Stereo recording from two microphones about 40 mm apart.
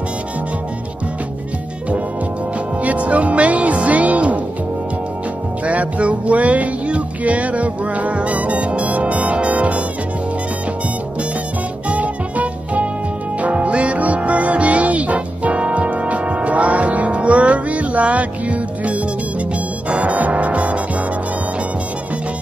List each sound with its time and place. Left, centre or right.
2.8 s music: right
5.7 s music: right
11.9 s music: right